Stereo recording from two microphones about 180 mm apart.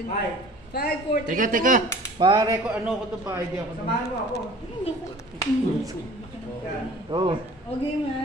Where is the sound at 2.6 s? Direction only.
10° right (ahead or behind).